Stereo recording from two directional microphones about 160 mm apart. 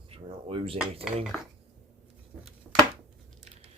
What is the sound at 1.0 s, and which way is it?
Dishes, centre (ahead or behind).